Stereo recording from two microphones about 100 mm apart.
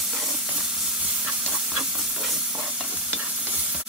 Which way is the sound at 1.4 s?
10° right (ahead or behind).